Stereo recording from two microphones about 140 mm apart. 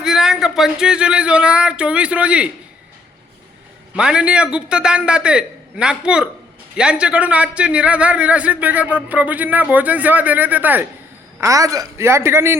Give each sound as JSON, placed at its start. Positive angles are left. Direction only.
{"t": 0.0, "sound": "speech", "side_deg": -5}
{"t": 3.9, "sound": "a man's voice", "side_deg": -5}
{"t": 11.3, "sound": "a woman's voice", "side_deg": -25}